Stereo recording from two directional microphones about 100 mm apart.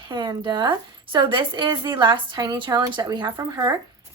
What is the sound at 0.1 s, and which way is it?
A woman's voice, 45° right (ahead or behind).